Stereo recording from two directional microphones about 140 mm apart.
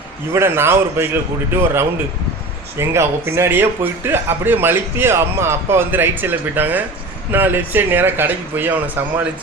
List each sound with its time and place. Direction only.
0.3 s speech: 15° right (ahead or behind)
2.7 s speech: 20° right (ahead or behind)